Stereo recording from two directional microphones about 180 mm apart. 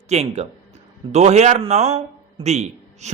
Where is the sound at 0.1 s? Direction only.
35° right (ahead or behind).